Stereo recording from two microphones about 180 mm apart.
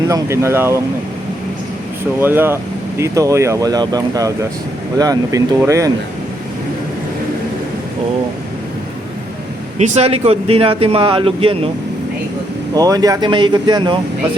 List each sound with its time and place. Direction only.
0.1 s speech: 15° right (ahead or behind)
2.2 s speech: 10° right (ahead or behind)
9.7 s speech: 40° right (ahead or behind)
12.7 s speech: 20° right (ahead or behind)